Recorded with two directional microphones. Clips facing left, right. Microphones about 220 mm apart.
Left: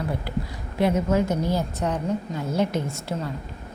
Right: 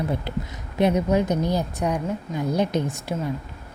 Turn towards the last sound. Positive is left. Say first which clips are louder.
# right 2 dB
turn(degrees=-15)  # may be behind; listen again after turning